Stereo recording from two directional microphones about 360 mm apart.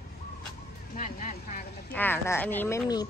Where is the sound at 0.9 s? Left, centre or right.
Left.